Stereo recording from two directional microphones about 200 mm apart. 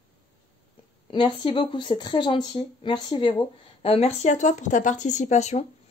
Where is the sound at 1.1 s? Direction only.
25° left (ahead or behind).